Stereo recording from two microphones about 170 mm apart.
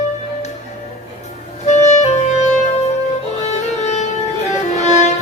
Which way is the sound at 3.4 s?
40° left (ahead or behind).